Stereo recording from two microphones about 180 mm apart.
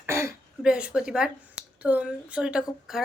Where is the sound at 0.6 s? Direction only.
5° right (ahead or behind).